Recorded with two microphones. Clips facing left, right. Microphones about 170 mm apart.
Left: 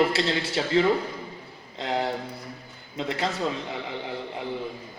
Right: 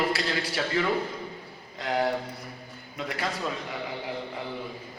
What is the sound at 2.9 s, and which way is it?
Speech, 25° left (ahead or behind).